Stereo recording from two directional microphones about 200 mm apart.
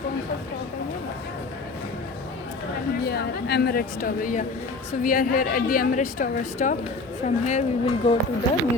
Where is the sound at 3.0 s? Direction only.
55° left (ahead or behind); by 7.6 s 35° left (ahead or behind).